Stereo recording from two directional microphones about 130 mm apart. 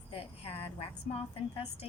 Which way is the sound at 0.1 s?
45° left (ahead or behind).